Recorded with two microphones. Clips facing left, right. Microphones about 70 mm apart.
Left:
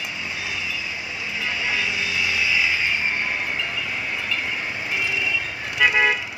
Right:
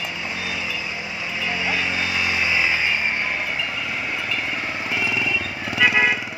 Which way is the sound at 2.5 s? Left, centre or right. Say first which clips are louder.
Right 1 dB; right.